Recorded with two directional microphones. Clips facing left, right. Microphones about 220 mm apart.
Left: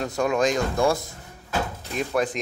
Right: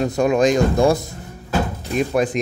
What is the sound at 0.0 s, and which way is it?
Speech, 15° right (ahead or behind).